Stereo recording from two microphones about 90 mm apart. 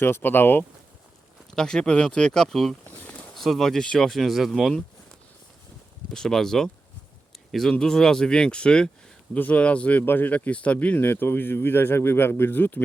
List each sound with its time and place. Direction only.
0.0 s speech: 25° left (ahead or behind)
1.5 s speech: 5° left (ahead or behind)
2.8 s a sound: 15° left (ahead or behind)
3.3 s speech: centre (ahead or behind)
6.1 s speech: 5° left (ahead or behind); by 12.8 s 20° left (ahead or behind)